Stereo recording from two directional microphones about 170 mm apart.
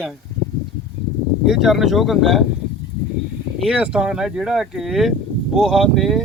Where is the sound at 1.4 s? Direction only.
Centre (ahead or behind).